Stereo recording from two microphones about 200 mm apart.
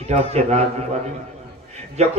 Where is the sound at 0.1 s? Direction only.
35° right (ahead or behind).